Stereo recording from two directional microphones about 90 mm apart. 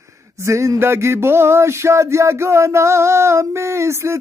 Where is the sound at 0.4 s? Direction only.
35° right (ahead or behind).